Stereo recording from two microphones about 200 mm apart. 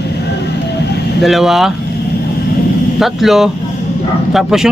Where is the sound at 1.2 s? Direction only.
Centre (ahead or behind).